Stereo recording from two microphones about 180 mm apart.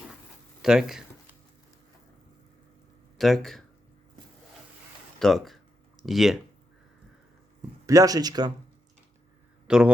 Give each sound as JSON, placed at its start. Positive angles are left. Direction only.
{"t": 0.6, "sound": "speech", "side_deg": 0}
{"t": 3.2, "sound": "speech", "side_deg": 0}
{"t": 5.2, "sound": "speech", "side_deg": 0}
{"t": 7.9, "sound": "speech", "side_deg": -20}
{"t": 9.6, "sound": "a man's voice", "side_deg": -5}